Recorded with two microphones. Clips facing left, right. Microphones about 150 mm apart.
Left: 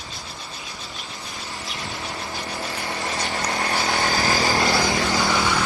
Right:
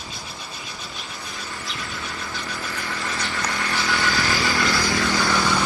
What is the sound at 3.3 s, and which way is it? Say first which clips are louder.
Vehicle: left 3 dB; 30° left (ahead or behind).